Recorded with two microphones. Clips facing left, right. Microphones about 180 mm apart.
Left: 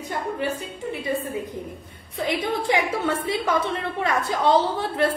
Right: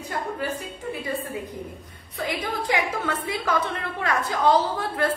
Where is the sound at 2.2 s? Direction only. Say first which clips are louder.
Left 4 dB; 25° left (ahead or behind).